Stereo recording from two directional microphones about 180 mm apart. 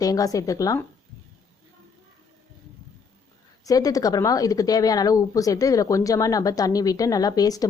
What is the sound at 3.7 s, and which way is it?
Speech, 20° left (ahead or behind).